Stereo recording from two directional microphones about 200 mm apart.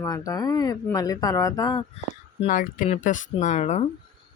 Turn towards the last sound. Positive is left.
turn(degrees=35)  # may be behind; listen again after turning